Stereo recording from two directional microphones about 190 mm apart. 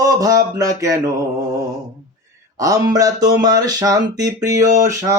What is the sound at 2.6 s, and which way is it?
Speech, 20° right (ahead or behind).